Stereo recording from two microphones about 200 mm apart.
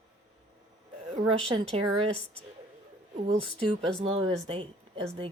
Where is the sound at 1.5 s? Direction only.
30° right (ahead or behind).